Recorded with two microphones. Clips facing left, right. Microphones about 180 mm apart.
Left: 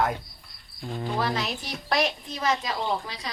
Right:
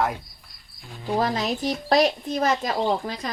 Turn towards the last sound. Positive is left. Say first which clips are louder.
# right 5 dB
turn(degrees=-45)  # may be behind; listen again after turning